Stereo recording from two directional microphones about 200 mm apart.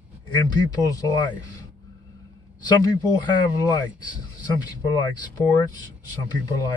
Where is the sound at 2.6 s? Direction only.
20° left (ahead or behind).